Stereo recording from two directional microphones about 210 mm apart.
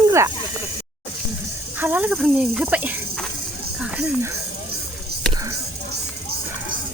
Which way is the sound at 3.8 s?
5° right (ahead or behind).